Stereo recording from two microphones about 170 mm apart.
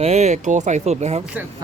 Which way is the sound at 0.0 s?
40° right (ahead or behind).